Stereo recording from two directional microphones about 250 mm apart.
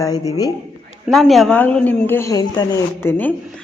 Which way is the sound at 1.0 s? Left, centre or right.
Centre.